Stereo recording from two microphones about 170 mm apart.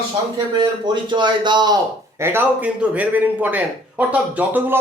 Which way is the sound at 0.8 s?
25° right (ahead or behind).